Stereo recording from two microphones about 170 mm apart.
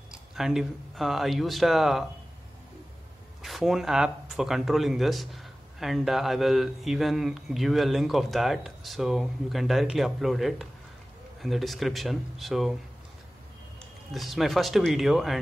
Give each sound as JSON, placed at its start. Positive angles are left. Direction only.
{"t": 0.1, "sound": "speech", "side_deg": -5}
{"t": 3.4, "sound": "speech", "side_deg": 0}
{"t": 14.1, "sound": "speech", "side_deg": 0}